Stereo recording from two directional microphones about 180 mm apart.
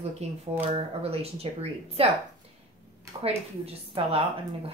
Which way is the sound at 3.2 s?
35° right (ahead or behind).